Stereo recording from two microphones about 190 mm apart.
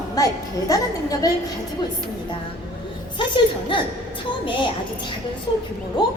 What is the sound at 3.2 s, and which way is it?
A woman's voice, 25° left (ahead or behind).